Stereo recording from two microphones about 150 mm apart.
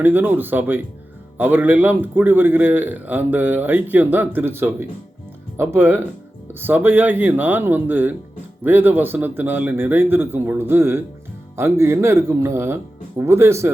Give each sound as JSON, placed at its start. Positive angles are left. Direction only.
{"t": 0.0, "sound": "a man's voice", "side_deg": -15}